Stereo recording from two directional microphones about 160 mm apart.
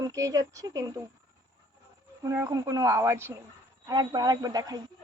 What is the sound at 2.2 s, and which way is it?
Speech, 20° right (ahead or behind).